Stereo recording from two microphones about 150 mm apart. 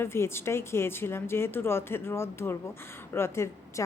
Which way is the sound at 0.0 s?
15° left (ahead or behind).